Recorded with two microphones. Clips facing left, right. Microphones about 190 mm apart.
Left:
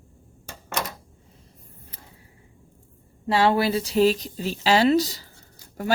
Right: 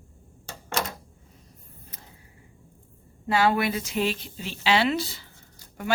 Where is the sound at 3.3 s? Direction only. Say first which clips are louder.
Left 3 dB; 30° left (ahead or behind).